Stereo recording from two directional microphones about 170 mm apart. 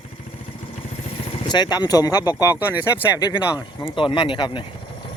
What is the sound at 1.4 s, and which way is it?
Speech, 25° left (ahead or behind).